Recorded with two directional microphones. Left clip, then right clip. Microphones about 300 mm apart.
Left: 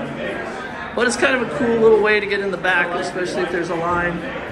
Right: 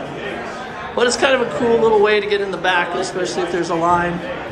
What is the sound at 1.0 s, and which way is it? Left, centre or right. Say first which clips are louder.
A man's voice: right 2 dB; centre.